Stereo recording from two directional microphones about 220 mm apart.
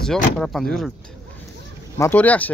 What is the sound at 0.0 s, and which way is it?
Speech, centre (ahead or behind).